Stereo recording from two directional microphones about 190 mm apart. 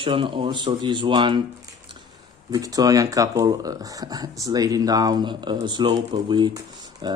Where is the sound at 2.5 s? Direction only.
20° right (ahead or behind).